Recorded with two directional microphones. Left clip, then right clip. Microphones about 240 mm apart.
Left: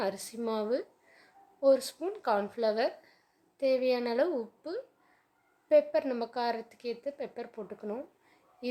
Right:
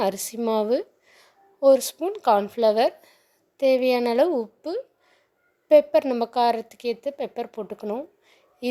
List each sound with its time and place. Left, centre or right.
0.0 s a woman's voice: right